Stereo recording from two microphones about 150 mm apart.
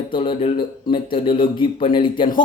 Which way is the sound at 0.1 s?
35° left (ahead or behind).